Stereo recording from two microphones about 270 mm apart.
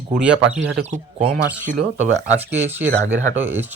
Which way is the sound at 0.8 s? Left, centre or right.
Right.